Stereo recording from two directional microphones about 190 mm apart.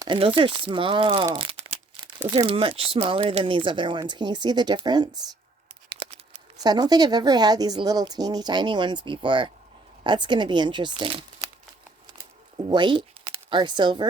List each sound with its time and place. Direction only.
0.0 s speech: 25° right (ahead or behind)
1.2 s crumpling: 25° right (ahead or behind)
2.3 s speech: 25° right (ahead or behind)
5.9 s a sound: 30° right (ahead or behind)
6.6 s speech: 20° right (ahead or behind)
12.6 s speech: 25° right (ahead or behind)